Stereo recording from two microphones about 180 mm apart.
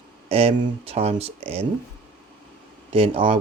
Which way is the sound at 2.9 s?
30° right (ahead or behind).